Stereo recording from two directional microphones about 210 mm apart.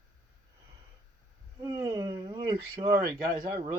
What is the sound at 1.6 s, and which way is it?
Speech, 15° right (ahead or behind).